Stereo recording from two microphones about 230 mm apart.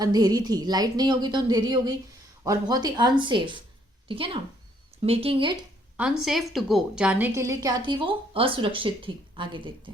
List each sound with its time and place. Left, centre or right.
0.0 s a woman's voice: centre
6.0 s a woman's voice: centre; by 9.9 s right